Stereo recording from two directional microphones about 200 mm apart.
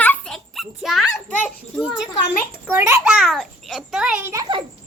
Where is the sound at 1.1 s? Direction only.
5° left (ahead or behind).